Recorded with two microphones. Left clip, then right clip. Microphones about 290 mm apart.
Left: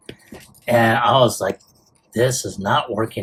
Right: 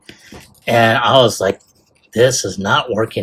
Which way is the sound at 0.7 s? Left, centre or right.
Right.